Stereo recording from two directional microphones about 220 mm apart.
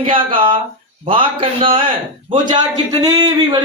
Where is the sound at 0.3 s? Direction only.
25° right (ahead or behind).